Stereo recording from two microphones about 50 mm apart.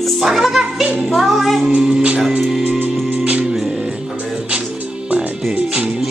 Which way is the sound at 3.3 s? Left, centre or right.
Centre.